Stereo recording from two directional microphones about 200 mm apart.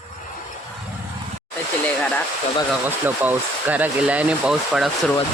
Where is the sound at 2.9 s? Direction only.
10° right (ahead or behind).